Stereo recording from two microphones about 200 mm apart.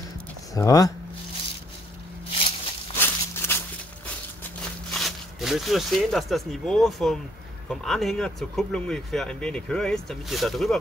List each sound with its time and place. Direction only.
0.6 s speech: 15° left (ahead or behind)
3.0 s walk: 10° left (ahead or behind)
4.9 s speech: centre (ahead or behind)